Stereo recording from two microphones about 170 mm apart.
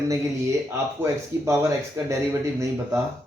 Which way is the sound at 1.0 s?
15° right (ahead or behind).